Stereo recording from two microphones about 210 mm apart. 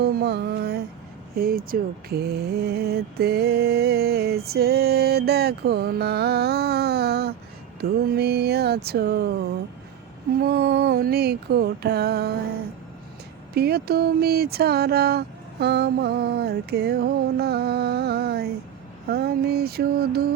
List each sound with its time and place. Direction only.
0.0 s mantra: 50° right (ahead or behind)
10.3 s mantra: 45° right (ahead or behind)
13.5 s mantra: 50° right (ahead or behind)